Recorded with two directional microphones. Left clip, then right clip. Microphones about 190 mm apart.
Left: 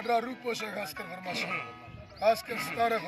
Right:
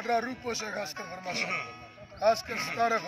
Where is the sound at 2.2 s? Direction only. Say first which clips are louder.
Right 1 dB; 10° right (ahead or behind).